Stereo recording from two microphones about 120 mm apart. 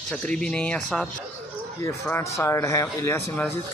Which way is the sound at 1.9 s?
20° left (ahead or behind).